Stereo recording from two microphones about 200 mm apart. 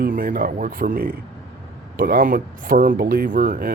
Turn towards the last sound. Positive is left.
turn(degrees=-40)  # may be behind; listen again after turning